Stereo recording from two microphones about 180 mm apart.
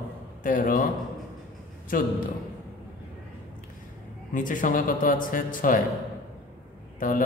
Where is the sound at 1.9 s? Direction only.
50° left (ahead or behind).